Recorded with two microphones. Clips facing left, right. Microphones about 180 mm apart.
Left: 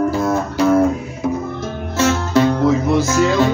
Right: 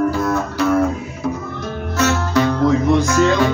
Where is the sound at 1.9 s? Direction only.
25° left (ahead or behind).